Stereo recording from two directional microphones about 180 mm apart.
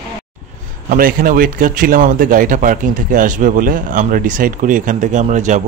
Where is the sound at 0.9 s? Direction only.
50° right (ahead or behind).